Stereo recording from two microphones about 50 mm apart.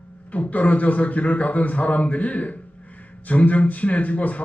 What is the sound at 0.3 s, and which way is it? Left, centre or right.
A man's voice, left.